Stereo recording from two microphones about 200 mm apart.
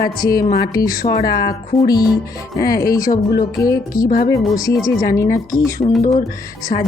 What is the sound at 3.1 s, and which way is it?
Music, 50° left (ahead or behind).